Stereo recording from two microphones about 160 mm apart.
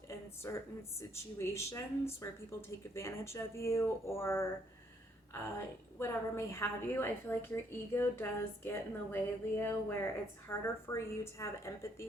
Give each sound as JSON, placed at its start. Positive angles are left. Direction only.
{"t": 0.4, "sound": "a woman's voice", "side_deg": 20}